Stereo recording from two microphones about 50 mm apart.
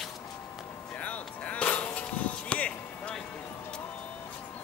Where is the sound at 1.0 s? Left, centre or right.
Left.